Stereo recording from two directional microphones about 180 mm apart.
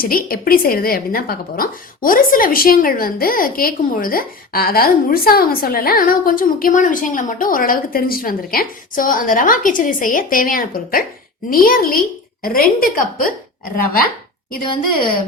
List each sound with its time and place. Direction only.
0.0 s a woman's voice: 55° left (ahead or behind)
14.8 s a woman's voice: 50° left (ahead or behind)